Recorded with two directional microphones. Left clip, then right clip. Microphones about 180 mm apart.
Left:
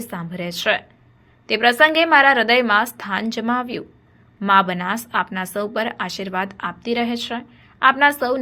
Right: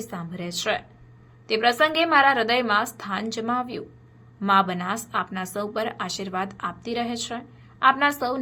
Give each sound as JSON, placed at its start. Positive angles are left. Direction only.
{"t": 0.0, "sound": "a woman's voice", "side_deg": 25}